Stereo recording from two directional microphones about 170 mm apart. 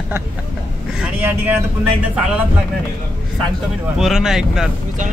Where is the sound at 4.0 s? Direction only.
Centre (ahead or behind).